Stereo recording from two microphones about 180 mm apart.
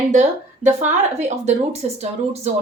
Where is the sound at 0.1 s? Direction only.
40° right (ahead or behind).